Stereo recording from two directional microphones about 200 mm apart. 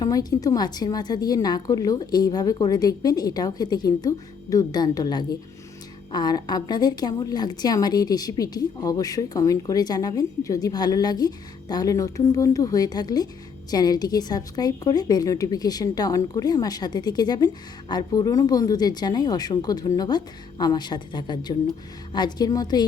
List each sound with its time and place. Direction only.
0.0 s a woman's voice: 20° left (ahead or behind)